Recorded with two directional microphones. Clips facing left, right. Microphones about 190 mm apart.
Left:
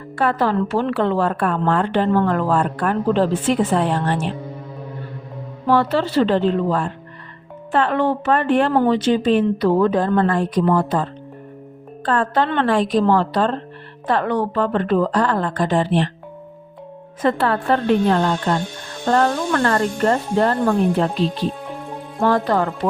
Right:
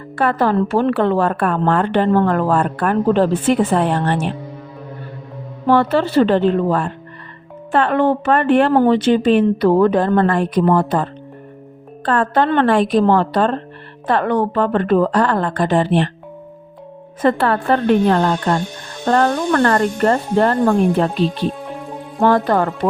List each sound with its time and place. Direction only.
0.2 s speech: 55° right (ahead or behind)
5.6 s speech: 55° right (ahead or behind)
17.2 s speech: 55° right (ahead or behind)
22.2 s speech: 55° right (ahead or behind)